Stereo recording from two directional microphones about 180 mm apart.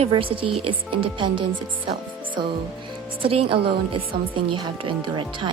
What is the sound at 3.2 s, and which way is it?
Speech, 30° right (ahead or behind).